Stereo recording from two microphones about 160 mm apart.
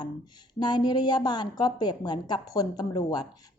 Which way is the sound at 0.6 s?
25° left (ahead or behind).